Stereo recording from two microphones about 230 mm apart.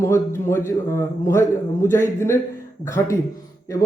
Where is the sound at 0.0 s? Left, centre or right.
Centre.